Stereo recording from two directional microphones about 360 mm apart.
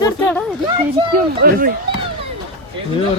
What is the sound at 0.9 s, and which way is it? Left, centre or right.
Speech, right.